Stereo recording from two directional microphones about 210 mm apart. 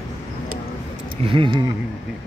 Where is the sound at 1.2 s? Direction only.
25° right (ahead or behind).